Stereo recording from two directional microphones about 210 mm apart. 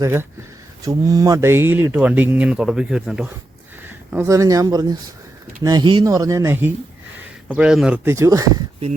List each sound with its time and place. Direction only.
0.0 s speech: 10° right (ahead or behind)